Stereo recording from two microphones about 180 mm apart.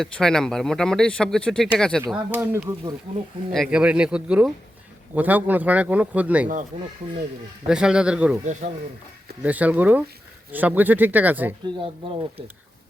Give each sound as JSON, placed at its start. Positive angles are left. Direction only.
{"t": 0.0, "sound": "speech", "side_deg": 5}
{"t": 2.1, "sound": "speech", "side_deg": -10}
{"t": 3.5, "sound": "speech", "side_deg": 0}
{"t": 7.7, "sound": "speech", "side_deg": -5}
{"t": 8.6, "sound": "speech", "side_deg": -45}
{"t": 9.4, "sound": "speech", "side_deg": -10}
{"t": 11.6, "sound": "speech", "side_deg": -30}